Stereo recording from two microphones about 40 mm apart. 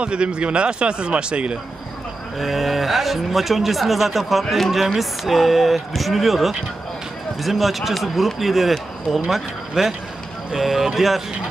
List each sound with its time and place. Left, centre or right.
0.0 s speech: right
2.3 s a man's voice: centre